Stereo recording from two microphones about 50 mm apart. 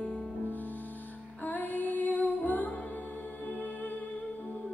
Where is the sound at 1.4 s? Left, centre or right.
Left.